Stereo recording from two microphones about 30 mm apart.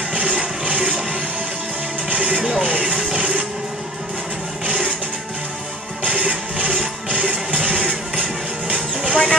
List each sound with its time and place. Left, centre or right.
0.1 s music: right
2.0 s music: right
6.0 s music: right
9.1 s vehicle: left